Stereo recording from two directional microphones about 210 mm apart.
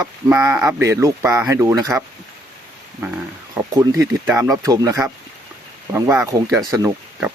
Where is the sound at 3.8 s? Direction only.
15° right (ahead or behind).